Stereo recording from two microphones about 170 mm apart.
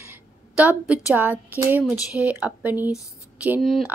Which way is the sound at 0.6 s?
10° right (ahead or behind).